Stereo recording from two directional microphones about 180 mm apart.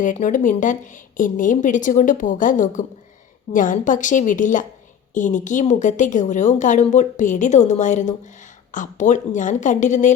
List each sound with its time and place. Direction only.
0.0 s a woman's voice: 45° left (ahead or behind)